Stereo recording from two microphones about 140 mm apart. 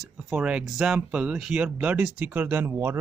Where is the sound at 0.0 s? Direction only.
10° right (ahead or behind).